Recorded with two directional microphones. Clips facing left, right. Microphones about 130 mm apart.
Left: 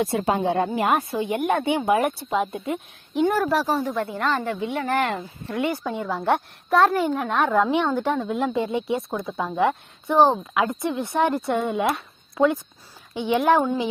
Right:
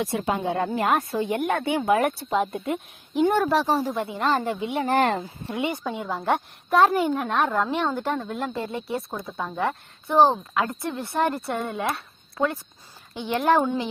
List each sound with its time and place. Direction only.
0.3 s a woman's voice: 30° left (ahead or behind)
0.6 s speech: 10° left (ahead or behind)
2.3 s a woman's voice: centre (ahead or behind)
3.7 s speech: 30° right (ahead or behind)
4.4 s speech: 20° right (ahead or behind)
4.9 s speech: 35° right (ahead or behind)
5.5 s a woman's voice: centre (ahead or behind)
10.5 s speech: 10° left (ahead or behind)
11.1 s speech: 10° right (ahead or behind)
11.4 s speech: centre (ahead or behind)